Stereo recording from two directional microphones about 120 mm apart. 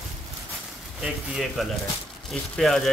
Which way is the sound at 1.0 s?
Centre (ahead or behind).